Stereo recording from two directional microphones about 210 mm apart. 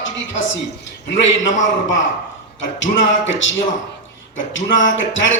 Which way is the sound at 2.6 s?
60° left (ahead or behind).